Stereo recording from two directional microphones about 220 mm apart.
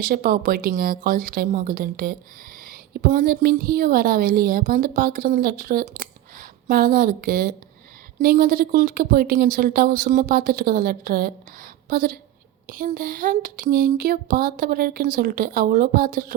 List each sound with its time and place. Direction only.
0.0 s speech: 40° right (ahead or behind)